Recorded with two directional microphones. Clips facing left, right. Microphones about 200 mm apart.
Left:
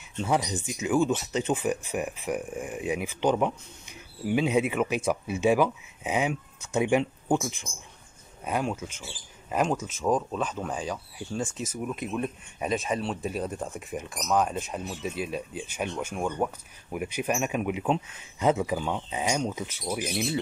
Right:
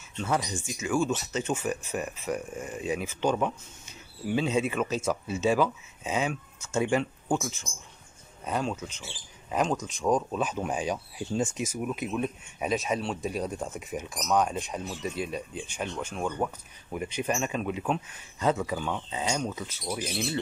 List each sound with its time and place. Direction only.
0.2 s speech: 15° left (ahead or behind)
10.4 s speech: 10° right (ahead or behind); by 20.2 s 10° left (ahead or behind)